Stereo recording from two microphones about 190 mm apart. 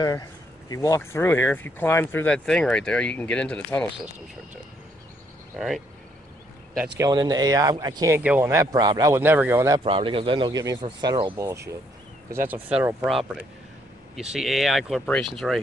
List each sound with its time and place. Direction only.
0.0 s speech: 20° left (ahead or behind)
7.0 s speech: 20° right (ahead or behind)
8.2 s speech: 10° right (ahead or behind)
9.8 s speech: 30° right (ahead or behind); by 12.9 s 5° right (ahead or behind)
14.3 s speech: centre (ahead or behind)